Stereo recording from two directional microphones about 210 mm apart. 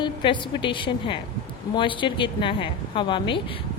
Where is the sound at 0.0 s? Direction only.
20° left (ahead or behind).